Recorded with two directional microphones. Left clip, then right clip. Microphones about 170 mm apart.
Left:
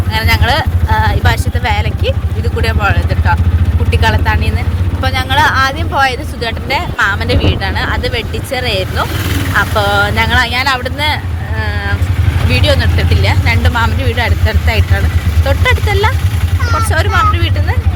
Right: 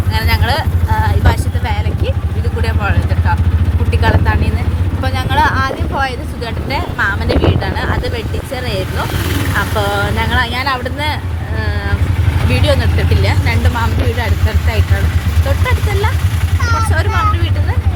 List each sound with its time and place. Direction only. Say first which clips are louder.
0.1 s vehicle: left 4 dB; centre (ahead or behind)
5.9 s speech: left 6 dB; 5° left (ahead or behind); by 11.2 s 10° right (ahead or behind)
12.5 s speech: left 3 dB; 15° right (ahead or behind)
13.7 s speech: left 4 dB; 5° left (ahead or behind)
15.4 s speech: left 6 dB; 20° left (ahead or behind)
17.1 s speech: left 4 dB; 15° left (ahead or behind)